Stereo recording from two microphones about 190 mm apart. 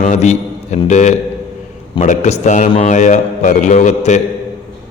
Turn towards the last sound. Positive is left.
turn(degrees=40)  # may be behind; listen again after turning